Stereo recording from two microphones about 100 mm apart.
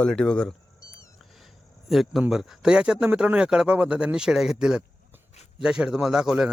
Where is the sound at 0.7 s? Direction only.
30° left (ahead or behind).